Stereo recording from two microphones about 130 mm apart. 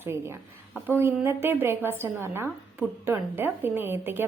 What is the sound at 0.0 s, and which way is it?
A woman's voice, 20° right (ahead or behind).